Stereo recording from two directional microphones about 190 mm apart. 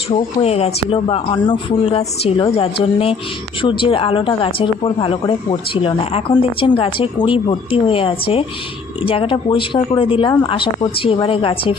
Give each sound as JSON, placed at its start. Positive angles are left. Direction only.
{"t": 0.1, "sound": "a woman's voice", "side_deg": 35}